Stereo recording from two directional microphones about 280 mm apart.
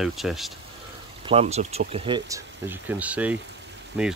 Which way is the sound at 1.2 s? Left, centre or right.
Right.